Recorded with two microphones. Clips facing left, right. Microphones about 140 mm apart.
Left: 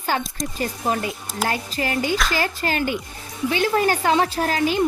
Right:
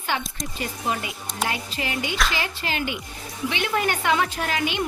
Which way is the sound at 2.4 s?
45° left (ahead or behind).